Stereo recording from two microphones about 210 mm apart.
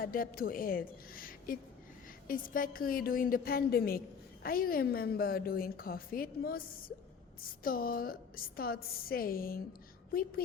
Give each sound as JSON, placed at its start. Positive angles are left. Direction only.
{"t": 0.0, "sound": "a woman's voice", "side_deg": 45}